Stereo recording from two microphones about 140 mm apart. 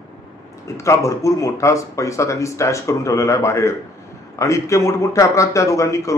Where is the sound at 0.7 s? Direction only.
20° left (ahead or behind).